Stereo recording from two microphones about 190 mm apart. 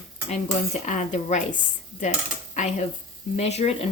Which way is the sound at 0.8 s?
40° left (ahead or behind).